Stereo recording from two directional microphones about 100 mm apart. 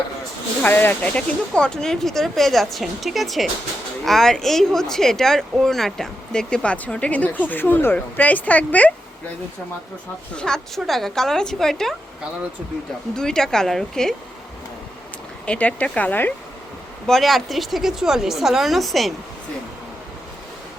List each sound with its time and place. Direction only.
0.6 s speech: 20° left (ahead or behind)
10.3 s speech: 5° left (ahead or behind)
13.1 s speech: 5° left (ahead or behind)
15.4 s speech: 15° left (ahead or behind)
17.1 s speech: centre (ahead or behind)